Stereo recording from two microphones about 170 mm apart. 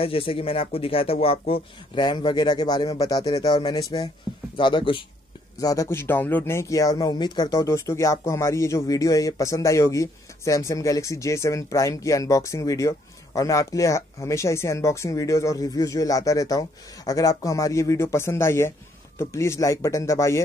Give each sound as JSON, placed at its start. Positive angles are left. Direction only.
{"t": 0.0, "sound": "speech", "side_deg": 35}